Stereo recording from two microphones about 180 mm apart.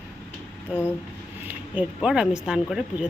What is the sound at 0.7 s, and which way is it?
Speech, 10° right (ahead or behind).